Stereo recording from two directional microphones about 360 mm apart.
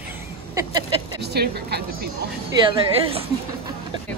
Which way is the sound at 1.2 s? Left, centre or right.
Right.